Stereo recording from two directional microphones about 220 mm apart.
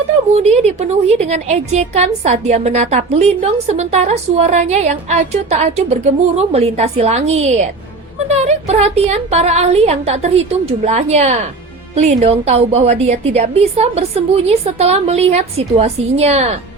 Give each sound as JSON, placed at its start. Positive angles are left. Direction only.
{"t": 0.3, "sound": "a woman's voice", "side_deg": -30}